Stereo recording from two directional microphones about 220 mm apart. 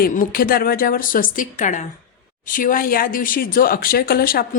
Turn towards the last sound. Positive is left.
turn(degrees=40)  # may be behind; listen again after turning